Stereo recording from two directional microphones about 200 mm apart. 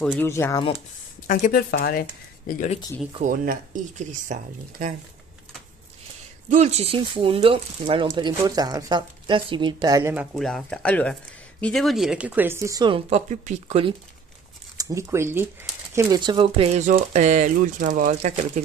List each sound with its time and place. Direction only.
0.0 s speech: 5° left (ahead or behind)
1.2 s speech: 40° left (ahead or behind)
3.2 s speech: 40° right (ahead or behind)
6.5 s speech: 35° right (ahead or behind); by 10.2 s 15° right (ahead or behind)
10.3 s speech: 5° left (ahead or behind); by 13.9 s 30° right (ahead or behind)
14.8 s speech: 15° right (ahead or behind); by 18.6 s 35° right (ahead or behind)